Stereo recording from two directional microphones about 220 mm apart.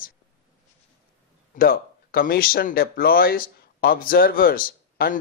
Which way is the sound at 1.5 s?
40° left (ahead or behind).